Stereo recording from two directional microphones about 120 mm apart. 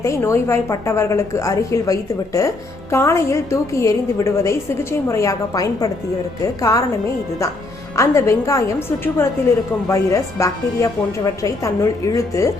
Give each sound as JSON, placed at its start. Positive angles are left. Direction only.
{"t": 0.0, "sound": "a woman's voice", "side_deg": 25}
{"t": 7.9, "sound": "a woman's voice", "side_deg": 25}
{"t": 9.9, "sound": "a woman's voice", "side_deg": 25}